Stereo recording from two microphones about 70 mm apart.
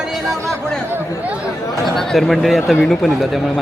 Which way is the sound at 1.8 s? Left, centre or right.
Centre.